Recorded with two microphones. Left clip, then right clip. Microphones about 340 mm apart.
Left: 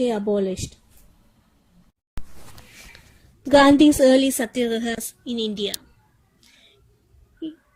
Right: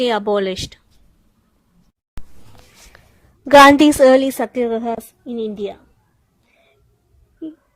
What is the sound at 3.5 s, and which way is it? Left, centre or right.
Speech, right.